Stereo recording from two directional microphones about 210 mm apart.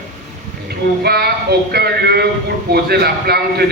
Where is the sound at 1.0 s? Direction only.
50° right (ahead or behind).